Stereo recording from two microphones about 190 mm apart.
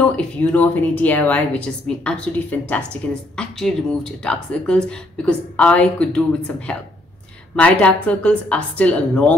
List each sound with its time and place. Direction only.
0.0 s a woman's voice: 10° left (ahead or behind)